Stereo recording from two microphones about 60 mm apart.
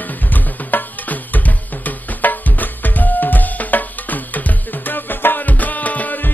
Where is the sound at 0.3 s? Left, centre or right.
Left.